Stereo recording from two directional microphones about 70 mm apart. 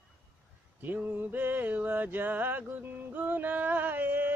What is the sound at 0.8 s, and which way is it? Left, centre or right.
Speech, right.